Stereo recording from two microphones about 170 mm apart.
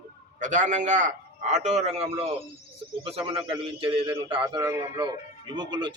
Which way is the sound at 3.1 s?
35° right (ahead or behind).